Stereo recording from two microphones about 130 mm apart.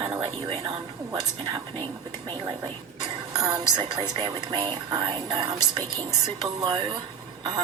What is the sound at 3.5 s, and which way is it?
Speech, 35° right (ahead or behind).